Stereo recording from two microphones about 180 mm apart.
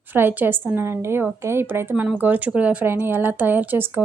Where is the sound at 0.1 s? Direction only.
10° right (ahead or behind).